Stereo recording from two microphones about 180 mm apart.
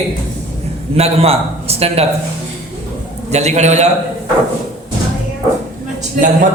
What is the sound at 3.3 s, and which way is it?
Speech, 40° right (ahead or behind).